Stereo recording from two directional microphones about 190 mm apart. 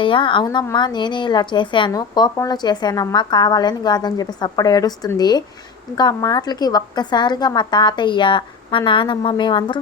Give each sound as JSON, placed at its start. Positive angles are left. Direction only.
{"t": 0.0, "sound": "a woman's voice", "side_deg": 25}